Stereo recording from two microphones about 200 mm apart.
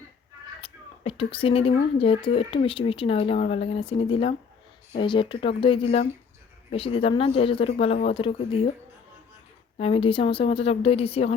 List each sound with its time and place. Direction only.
0.6 s a woman's voice: 30° left (ahead or behind)
9.7 s a woman's voice: 30° left (ahead or behind)